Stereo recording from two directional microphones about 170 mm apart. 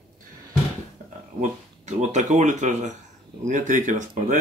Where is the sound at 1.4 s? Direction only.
45° right (ahead or behind).